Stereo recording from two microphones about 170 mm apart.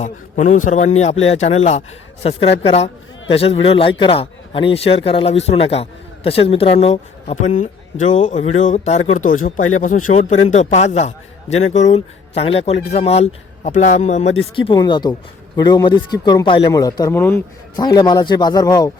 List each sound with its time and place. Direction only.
0.0 s a man's voice: 45° left (ahead or behind); by 17.4 s 15° left (ahead or behind)
17.7 s a man's voice: 25° left (ahead or behind)